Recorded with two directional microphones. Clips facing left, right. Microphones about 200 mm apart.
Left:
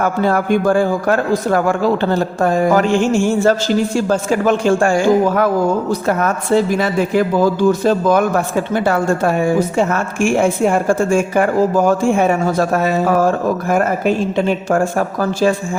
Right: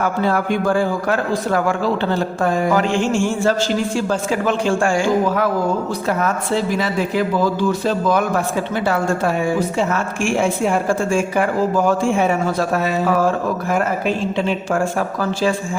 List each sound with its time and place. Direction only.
0.0 s speech: 45° left (ahead or behind)